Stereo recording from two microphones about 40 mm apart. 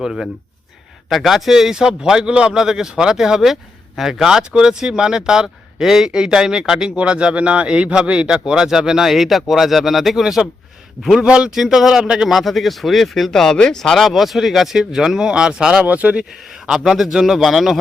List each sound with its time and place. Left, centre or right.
1.1 s speech: centre; by 11.5 s right
11.5 s speech: centre
12.3 s speech: centre; by 15.8 s right
15.8 s speech: right
16.5 s speech: centre